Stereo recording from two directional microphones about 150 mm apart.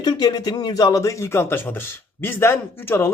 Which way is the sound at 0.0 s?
25° left (ahead or behind).